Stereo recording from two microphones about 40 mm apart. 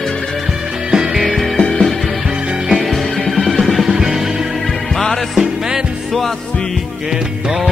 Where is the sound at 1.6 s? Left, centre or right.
Centre.